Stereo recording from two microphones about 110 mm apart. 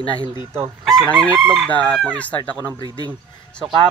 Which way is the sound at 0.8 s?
5° left (ahead or behind).